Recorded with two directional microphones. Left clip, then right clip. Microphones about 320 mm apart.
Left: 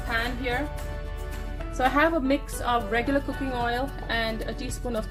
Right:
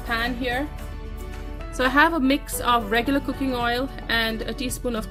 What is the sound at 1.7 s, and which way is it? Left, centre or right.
A woman's voice, right.